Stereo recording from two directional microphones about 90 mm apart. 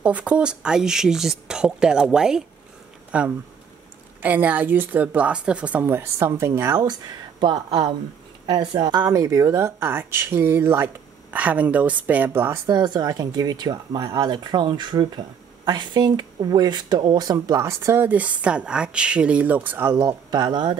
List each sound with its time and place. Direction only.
0.0 s speech: 15° right (ahead or behind); by 6.8 s 30° right (ahead or behind)
6.8 s speech: 50° right (ahead or behind); by 12.5 s 25° right (ahead or behind)
12.6 s speech: 50° right (ahead or behind)
17.6 s speech: 35° right (ahead or behind)
18.0 s speech: 15° right (ahead or behind)
20.0 s speech: 45° right (ahead or behind)